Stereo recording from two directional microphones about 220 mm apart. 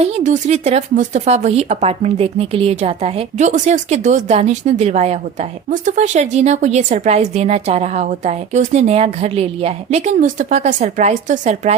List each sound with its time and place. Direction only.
0.0 s a woman's voice: 30° right (ahead or behind)